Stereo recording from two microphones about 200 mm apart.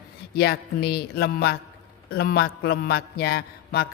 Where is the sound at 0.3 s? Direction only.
55° left (ahead or behind).